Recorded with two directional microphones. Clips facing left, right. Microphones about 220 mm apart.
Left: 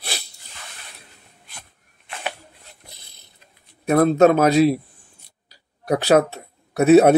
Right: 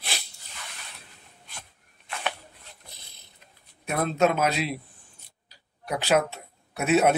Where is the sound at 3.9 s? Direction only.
45° left (ahead or behind).